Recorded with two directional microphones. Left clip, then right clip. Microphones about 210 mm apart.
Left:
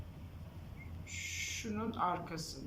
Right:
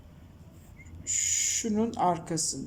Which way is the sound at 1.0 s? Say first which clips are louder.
Right 12 dB; 45° right (ahead or behind).